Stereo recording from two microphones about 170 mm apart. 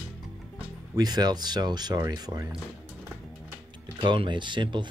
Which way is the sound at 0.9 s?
25° right (ahead or behind).